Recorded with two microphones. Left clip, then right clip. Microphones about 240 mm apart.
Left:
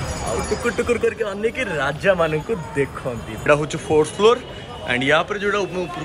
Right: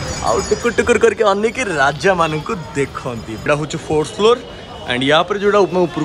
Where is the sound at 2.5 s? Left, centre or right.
Centre.